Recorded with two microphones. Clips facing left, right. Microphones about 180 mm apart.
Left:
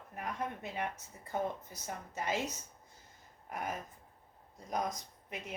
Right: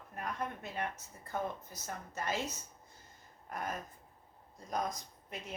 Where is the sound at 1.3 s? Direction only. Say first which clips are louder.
Left 2 dB; 15° left (ahead or behind).